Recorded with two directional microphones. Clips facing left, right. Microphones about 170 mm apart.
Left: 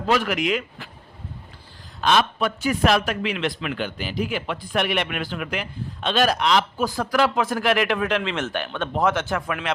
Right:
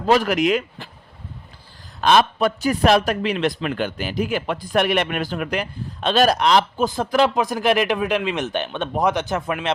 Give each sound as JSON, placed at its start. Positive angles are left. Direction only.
{"t": 0.1, "sound": "a man's voice", "side_deg": -40}
{"t": 2.0, "sound": "a man's voice", "side_deg": -45}
{"t": 6.7, "sound": "speech", "side_deg": -25}